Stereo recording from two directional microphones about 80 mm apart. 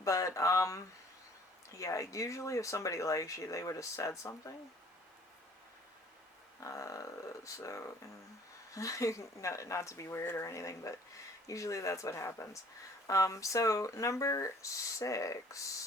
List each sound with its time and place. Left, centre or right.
0.0 s speech: left
1.8 s speech: left
6.6 s speech: left